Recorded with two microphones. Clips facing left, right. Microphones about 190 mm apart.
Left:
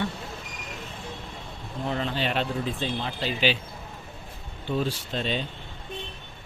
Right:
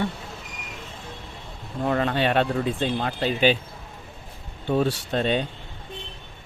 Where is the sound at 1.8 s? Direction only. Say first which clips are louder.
Right 6 dB; 55° right (ahead or behind).